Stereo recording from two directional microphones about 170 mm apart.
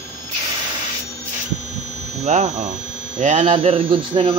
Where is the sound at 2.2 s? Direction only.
45° right (ahead or behind).